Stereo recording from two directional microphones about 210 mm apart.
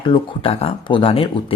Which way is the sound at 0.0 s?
25° left (ahead or behind).